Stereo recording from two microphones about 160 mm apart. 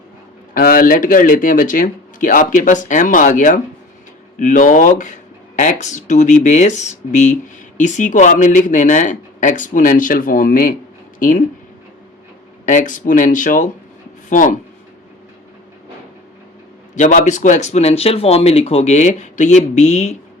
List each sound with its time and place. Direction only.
0.5 s speech: 60° left (ahead or behind)
12.6 s speech: 50° left (ahead or behind)
16.9 s speech: 50° left (ahead or behind)